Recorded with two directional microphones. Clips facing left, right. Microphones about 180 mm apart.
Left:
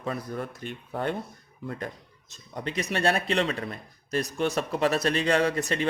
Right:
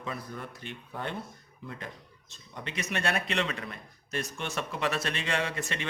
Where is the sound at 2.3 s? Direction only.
40° left (ahead or behind).